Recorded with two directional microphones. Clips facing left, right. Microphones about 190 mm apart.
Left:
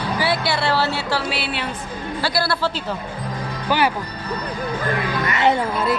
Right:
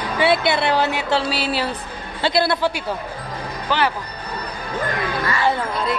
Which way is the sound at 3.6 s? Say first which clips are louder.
Left 1 dB; 10° left (ahead or behind).